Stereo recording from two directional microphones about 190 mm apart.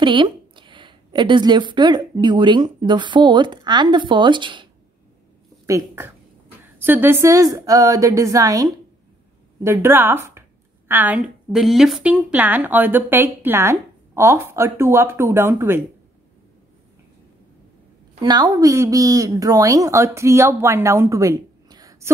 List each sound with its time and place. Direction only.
0.0 s speech: 25° right (ahead or behind)
5.7 s a woman's voice: 15° right (ahead or behind)
18.2 s a woman's voice: 20° right (ahead or behind)